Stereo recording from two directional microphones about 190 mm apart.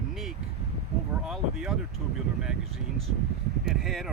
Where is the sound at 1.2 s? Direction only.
Centre (ahead or behind).